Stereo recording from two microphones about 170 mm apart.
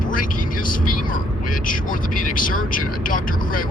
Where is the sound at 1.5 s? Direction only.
55° left (ahead or behind).